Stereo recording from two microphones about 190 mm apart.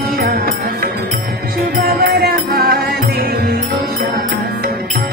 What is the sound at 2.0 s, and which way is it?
Music, 55° right (ahead or behind).